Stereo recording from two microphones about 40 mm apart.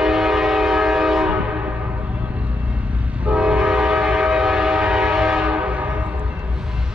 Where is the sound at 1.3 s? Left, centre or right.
Right.